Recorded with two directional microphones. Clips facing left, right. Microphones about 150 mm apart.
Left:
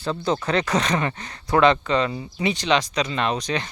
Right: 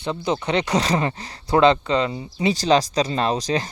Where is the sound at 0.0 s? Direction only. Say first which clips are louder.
Even; 15° right (ahead or behind).